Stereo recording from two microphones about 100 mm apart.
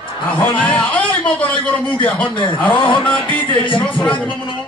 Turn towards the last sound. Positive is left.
turn(degrees=10)  # may be behind; listen again after turning